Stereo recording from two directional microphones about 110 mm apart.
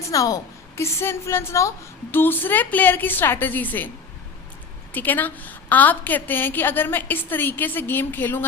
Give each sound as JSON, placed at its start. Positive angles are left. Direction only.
{"t": 0.1, "sound": "a woman's voice", "side_deg": 30}